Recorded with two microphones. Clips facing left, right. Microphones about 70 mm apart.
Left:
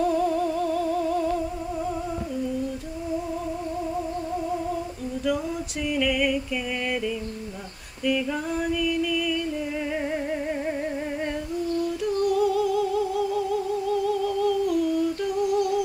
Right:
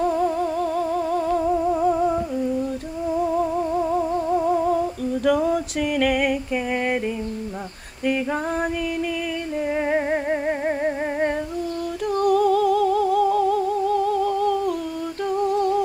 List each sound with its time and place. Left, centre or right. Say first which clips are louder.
0.7 s music: right 2 dB; right
1.7 s humming: right 9 dB; right
5.2 s a sound: right 7 dB; right
8.0 s a sound: right 3 dB; right
9.8 s humming: right 6 dB; right
12.2 s music: right 5 dB; right
15.4 s humming: right 3 dB; right